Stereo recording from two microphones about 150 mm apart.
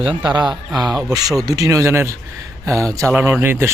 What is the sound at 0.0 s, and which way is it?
Speech, 35° right (ahead or behind).